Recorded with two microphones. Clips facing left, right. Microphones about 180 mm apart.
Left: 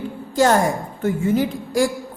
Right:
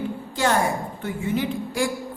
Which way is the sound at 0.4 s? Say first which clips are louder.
Left 5 dB; 45° left (ahead or behind).